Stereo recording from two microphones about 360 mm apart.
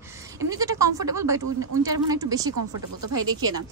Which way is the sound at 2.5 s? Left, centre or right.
Right.